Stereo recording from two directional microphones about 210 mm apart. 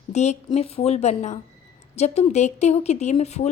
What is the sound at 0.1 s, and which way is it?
A woman's voice, 30° left (ahead or behind).